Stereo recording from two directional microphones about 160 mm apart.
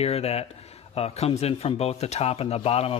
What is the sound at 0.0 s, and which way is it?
Speech, 40° left (ahead or behind).